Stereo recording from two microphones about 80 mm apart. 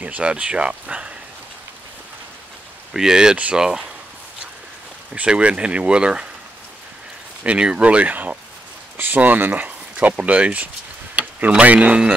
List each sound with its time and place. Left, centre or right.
0.0 s speech: centre
2.9 s speech: centre
5.1 s speech: centre
7.4 s speech: centre
11.1 s tick-tock: centre
11.5 s speech: centre